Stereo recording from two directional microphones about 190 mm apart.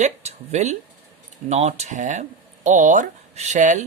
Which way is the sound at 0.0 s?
35° right (ahead or behind).